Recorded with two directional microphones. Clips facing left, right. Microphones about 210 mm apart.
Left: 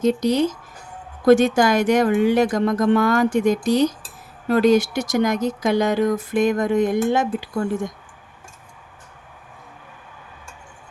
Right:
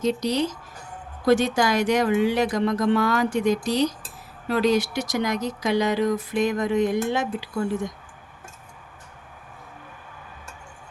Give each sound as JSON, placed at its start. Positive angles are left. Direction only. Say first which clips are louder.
{"t": 0.0, "sound": "speech", "louder": "left 5 dB", "side_deg": 50}